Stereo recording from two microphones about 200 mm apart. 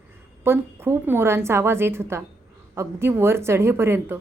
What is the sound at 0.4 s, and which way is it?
A woman's voice, 10° right (ahead or behind).